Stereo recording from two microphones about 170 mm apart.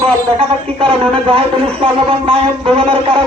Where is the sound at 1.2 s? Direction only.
30° right (ahead or behind).